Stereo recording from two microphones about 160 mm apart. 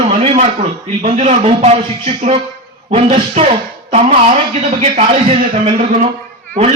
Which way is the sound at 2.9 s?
40° right (ahead or behind).